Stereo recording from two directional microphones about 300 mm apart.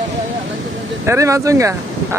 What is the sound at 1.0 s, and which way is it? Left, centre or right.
Speech, centre.